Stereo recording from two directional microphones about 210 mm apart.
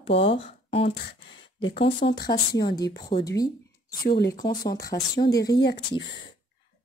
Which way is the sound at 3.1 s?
35° left (ahead or behind).